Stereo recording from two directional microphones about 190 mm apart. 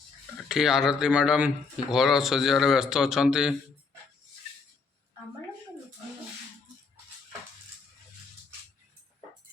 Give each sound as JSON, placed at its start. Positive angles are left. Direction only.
{"t": 0.4, "sound": "speech", "side_deg": 0}